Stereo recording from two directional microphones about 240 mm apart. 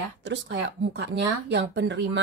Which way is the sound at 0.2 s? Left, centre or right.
Right.